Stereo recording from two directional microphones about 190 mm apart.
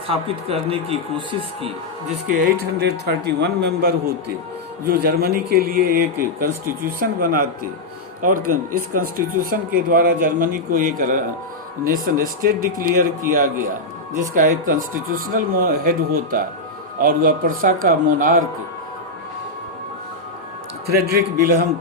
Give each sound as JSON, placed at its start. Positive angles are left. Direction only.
{"t": 0.1, "sound": "speech", "side_deg": -30}
{"t": 2.2, "sound": "speech", "side_deg": -45}
{"t": 8.9, "sound": "speech", "side_deg": -45}
{"t": 20.8, "sound": "speech", "side_deg": -50}